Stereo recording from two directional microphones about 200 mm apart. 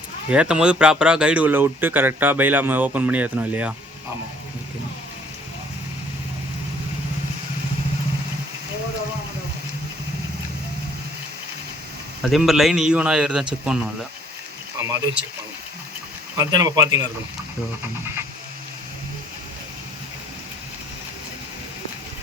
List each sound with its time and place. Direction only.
0.3 s speech: 5° right (ahead or behind)
12.3 s speech: centre (ahead or behind)
14.8 s speech: 15° right (ahead or behind)
16.4 s speech: 20° right (ahead or behind)